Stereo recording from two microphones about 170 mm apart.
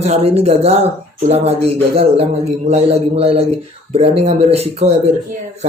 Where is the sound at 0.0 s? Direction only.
40° right (ahead or behind).